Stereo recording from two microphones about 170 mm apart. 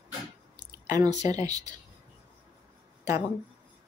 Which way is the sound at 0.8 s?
20° right (ahead or behind).